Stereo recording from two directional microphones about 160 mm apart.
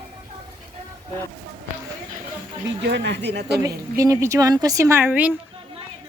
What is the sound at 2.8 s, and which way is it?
Speech, 90° right.